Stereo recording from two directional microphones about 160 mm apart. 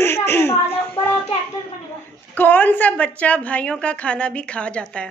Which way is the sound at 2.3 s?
10° left (ahead or behind).